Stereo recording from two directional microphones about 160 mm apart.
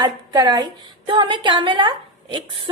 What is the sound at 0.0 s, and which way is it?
A woman's voice, 25° right (ahead or behind).